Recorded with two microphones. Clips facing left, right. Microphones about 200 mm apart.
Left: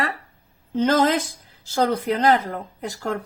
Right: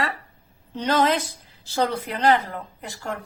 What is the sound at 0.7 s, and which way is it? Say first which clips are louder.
A woman's voice: left 3 dB; 45° left (ahead or behind).